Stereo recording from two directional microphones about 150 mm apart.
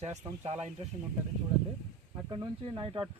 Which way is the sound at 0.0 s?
50° right (ahead or behind).